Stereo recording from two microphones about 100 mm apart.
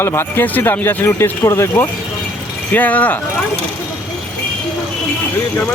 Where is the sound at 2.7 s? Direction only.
15° left (ahead or behind).